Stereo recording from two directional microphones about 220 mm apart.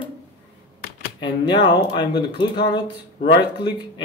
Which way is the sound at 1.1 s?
20° left (ahead or behind).